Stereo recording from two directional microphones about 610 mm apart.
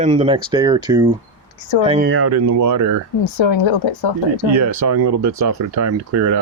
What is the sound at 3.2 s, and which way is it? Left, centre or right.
Speech, left.